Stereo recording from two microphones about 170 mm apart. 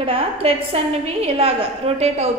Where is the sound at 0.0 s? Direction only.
35° right (ahead or behind).